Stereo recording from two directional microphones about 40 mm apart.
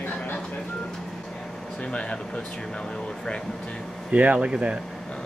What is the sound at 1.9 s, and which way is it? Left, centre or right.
Speech, left.